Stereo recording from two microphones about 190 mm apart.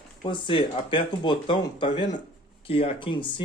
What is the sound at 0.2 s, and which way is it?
Speech, 25° left (ahead or behind).